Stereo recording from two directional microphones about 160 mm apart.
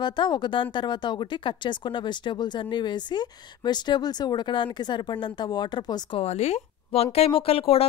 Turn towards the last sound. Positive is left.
turn(degrees=35)  # may be behind; listen again after turning